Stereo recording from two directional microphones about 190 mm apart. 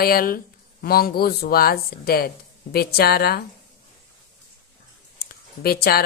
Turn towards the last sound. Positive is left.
turn(degrees=55)  # may be behind; listen again after turning